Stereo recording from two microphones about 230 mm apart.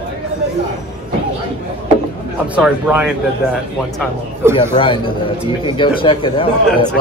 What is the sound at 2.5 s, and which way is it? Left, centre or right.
Speech, centre.